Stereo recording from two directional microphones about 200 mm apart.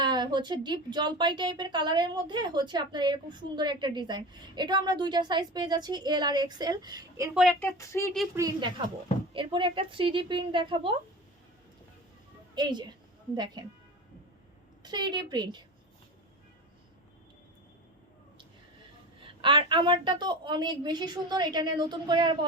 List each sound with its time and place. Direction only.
0.0 s speech: 20° right (ahead or behind)
7.5 s speech: 15° left (ahead or behind)
8.4 s speech: 20° right (ahead or behind)
12.5 s speech: 20° right (ahead or behind)
14.8 s speech: 20° right (ahead or behind)
19.2 s speech: 25° right (ahead or behind)